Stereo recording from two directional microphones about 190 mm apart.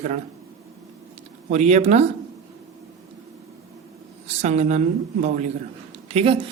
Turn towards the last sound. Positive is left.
turn(degrees=-30)  # may be behind; listen again after turning